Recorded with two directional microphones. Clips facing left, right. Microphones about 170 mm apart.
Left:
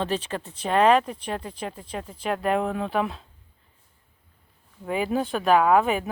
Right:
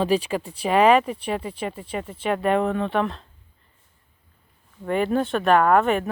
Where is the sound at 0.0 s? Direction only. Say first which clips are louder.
Right 6 dB; 10° right (ahead or behind).